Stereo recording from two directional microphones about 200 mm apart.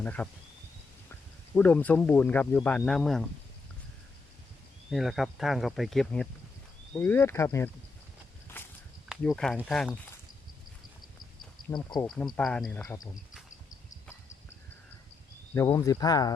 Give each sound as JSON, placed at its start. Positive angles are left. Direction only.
{"t": 0.0, "sound": "speech", "side_deg": 5}
{"t": 1.5, "sound": "speech", "side_deg": 10}
{"t": 4.9, "sound": "speech", "side_deg": 0}
{"t": 8.5, "sound": "walk", "side_deg": 10}
{"t": 9.0, "sound": "speech", "side_deg": 0}
{"t": 11.7, "sound": "speech", "side_deg": 20}
{"t": 12.1, "sound": "speech", "side_deg": 0}
{"t": 15.5, "sound": "speech", "side_deg": 15}